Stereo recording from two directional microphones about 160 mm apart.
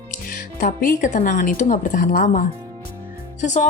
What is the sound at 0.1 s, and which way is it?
Speech, 55° left (ahead or behind).